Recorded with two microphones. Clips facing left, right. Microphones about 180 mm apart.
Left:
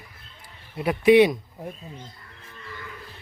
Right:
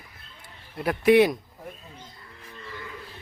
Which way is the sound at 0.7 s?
Centre (ahead or behind).